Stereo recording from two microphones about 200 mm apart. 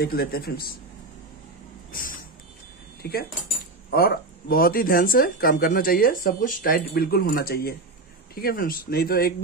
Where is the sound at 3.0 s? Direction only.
55° left (ahead or behind).